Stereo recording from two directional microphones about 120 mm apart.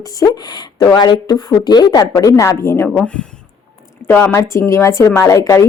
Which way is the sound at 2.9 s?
5° left (ahead or behind).